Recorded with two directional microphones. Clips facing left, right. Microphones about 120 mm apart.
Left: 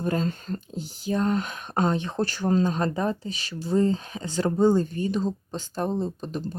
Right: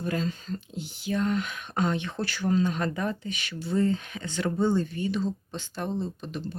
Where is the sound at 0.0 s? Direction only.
40° left (ahead or behind).